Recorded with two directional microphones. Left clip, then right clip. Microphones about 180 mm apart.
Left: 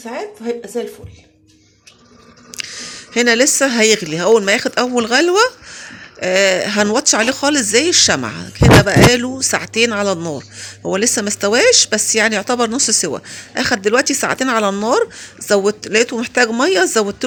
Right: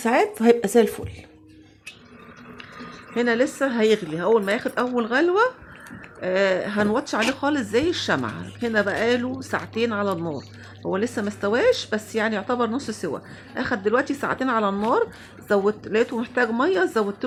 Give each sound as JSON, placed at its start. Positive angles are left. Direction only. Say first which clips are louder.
{"t": 0.0, "sound": "speech", "louder": "right 6 dB", "side_deg": -50}
{"t": 3.2, "sound": "speech", "louder": "left 9 dB", "side_deg": 30}